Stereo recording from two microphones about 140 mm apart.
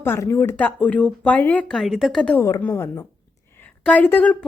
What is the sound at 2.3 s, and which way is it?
Speech, 15° left (ahead or behind).